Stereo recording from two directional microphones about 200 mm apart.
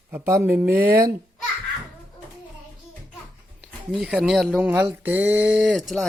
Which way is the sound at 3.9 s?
5° right (ahead or behind).